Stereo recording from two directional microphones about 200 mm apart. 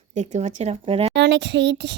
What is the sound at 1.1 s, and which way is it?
Speech, 65° right (ahead or behind).